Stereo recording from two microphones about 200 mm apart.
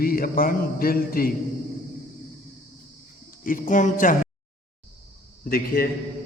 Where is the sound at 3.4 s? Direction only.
45° left (ahead or behind).